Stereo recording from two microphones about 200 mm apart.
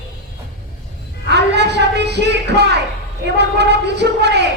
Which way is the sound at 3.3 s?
55° right (ahead or behind).